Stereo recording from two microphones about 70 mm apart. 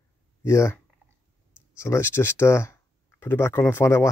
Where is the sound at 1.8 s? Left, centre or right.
Left.